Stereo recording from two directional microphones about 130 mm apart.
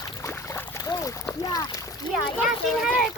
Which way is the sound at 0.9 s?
30° left (ahead or behind).